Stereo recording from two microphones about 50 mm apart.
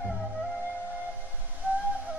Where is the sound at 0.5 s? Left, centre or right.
Right.